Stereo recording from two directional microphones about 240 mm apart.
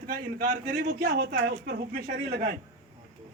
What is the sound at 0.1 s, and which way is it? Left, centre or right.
A man's voice, right.